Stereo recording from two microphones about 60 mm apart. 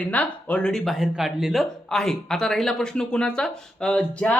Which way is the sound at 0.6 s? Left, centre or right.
Centre.